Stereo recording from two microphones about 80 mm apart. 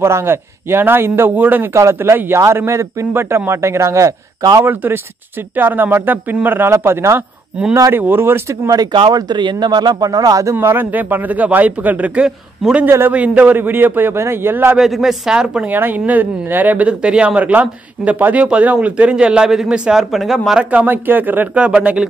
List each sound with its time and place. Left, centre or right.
0.0 s a man's voice: right
1.7 s speech: right
4.4 s speech: right
4.6 s a man's voice: right
9.1 s speech: right
10.5 s a man's voice: right
13.1 s a man's voice: centre
14.8 s speech: centre
15.7 s speech: right; by 20.6 s centre
20.7 s a man's voice: right